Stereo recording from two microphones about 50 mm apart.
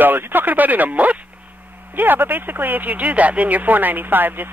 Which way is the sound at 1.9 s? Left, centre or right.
Right.